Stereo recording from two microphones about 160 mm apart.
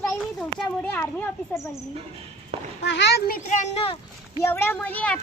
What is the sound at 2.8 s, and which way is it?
Speech, 90° left.